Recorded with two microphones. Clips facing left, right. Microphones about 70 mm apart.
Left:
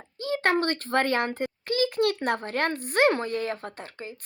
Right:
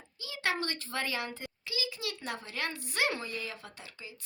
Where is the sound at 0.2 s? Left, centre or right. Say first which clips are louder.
Left 9 dB; left.